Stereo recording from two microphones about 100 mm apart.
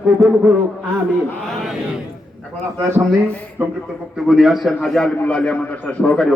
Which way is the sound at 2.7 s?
25° right (ahead or behind).